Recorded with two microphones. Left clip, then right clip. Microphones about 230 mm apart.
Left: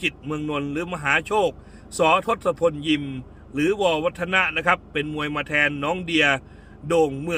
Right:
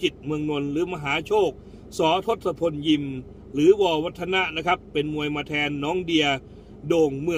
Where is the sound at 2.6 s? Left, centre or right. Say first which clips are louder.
Left 2 dB; centre.